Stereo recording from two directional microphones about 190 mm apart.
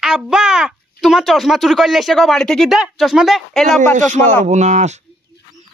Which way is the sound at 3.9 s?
40° right (ahead or behind).